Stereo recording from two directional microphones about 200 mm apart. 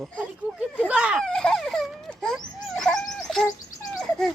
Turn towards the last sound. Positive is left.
turn(degrees=5)  # may be behind; listen again after turning